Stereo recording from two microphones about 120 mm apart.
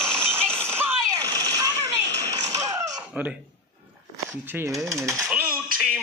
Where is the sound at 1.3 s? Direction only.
30° right (ahead or behind).